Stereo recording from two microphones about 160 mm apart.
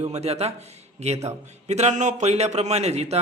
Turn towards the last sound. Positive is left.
turn(degrees=-40)  # may be behind; listen again after turning